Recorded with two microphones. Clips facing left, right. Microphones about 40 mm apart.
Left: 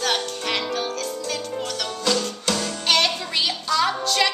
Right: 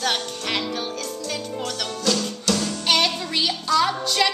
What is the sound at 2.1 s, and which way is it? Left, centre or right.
Music, left.